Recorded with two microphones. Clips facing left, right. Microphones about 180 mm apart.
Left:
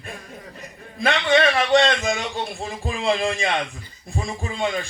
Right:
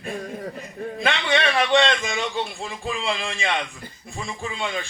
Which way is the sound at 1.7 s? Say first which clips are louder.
Left 2 dB; 40° left (ahead or behind).